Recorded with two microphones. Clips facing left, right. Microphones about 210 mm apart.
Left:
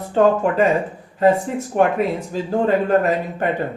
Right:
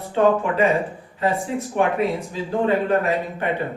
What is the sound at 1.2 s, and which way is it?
A man's voice, 40° left (ahead or behind).